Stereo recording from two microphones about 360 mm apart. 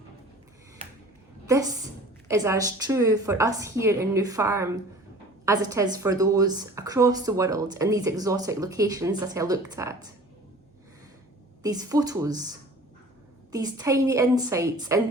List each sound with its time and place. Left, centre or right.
1.5 s a woman's voice: centre
11.6 s a woman's voice: centre
13.5 s a woman's voice: centre